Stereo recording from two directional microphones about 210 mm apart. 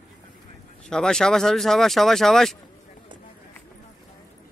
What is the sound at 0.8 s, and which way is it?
Speech, 5° left (ahead or behind).